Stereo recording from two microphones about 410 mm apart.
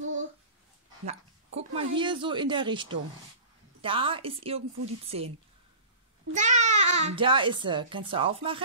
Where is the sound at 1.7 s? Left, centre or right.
Centre.